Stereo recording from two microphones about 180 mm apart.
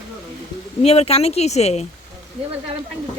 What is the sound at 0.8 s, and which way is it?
Speech, 35° left (ahead or behind).